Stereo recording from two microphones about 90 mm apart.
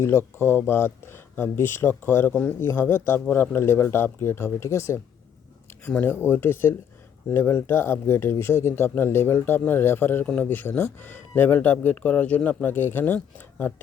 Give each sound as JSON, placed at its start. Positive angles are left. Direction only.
{"t": 0.3, "sound": "speech", "side_deg": 25}
{"t": 6.3, "sound": "speech", "side_deg": 25}